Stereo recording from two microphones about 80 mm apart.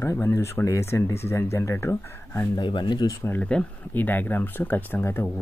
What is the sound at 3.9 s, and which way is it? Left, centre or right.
Speech, left.